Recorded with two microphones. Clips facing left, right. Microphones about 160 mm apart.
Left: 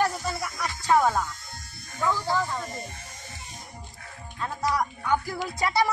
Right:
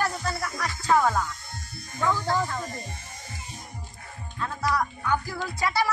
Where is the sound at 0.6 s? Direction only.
15° left (ahead or behind).